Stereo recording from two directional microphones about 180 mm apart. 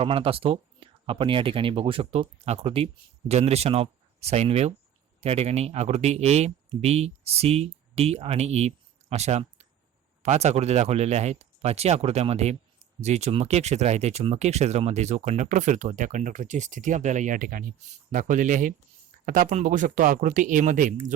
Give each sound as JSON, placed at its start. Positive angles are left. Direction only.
{"t": 0.0, "sound": "speech", "side_deg": -30}